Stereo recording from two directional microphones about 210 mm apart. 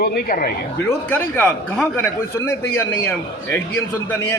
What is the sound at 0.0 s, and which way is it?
Speech, 45° left (ahead or behind).